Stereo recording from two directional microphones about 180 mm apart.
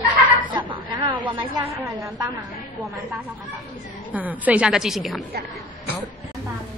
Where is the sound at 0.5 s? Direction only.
25° right (ahead or behind).